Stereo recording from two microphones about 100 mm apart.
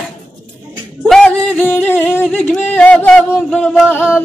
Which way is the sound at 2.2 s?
15° left (ahead or behind).